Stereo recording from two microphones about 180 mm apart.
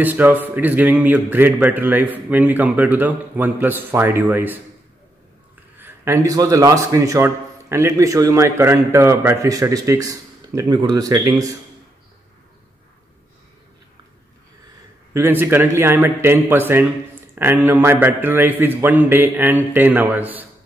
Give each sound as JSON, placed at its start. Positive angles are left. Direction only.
{"t": 0.0, "sound": "a man's voice", "side_deg": -10}
{"t": 5.8, "sound": "a man's voice", "side_deg": -15}
{"t": 15.1, "sound": "a man's voice", "side_deg": -10}